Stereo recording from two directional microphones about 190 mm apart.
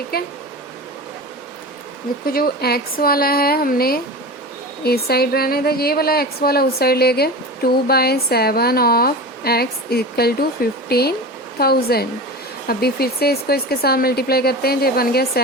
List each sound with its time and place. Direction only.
0.1 s a woman's voice: 55° left (ahead or behind)
2.2 s a woman's voice: 50° left (ahead or behind)